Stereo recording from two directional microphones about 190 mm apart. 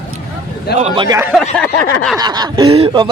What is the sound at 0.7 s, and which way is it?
Speech, 35° right (ahead or behind).